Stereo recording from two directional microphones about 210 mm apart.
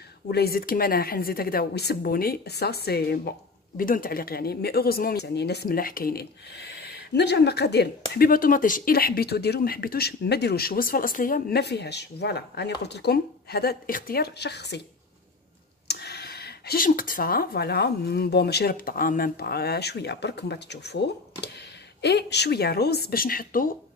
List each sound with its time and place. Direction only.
0.3 s a woman's voice: 50° left (ahead or behind)
15.9 s a woman's voice: 50° left (ahead or behind)